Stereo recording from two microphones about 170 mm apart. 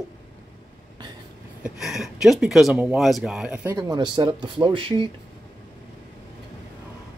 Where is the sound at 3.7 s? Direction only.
25° right (ahead or behind).